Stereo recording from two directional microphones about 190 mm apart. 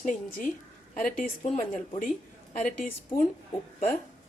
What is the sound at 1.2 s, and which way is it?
Speech, 40° left (ahead or behind).